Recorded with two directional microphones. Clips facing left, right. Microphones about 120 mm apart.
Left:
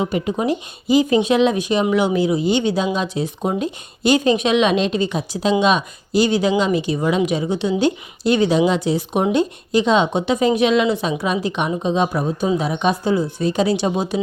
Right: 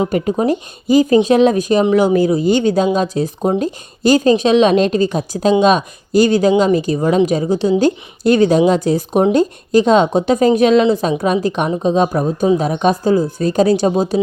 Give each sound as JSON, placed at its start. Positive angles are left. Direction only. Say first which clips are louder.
{"t": 0.0, "sound": "speech", "louder": "right 4 dB", "side_deg": -45}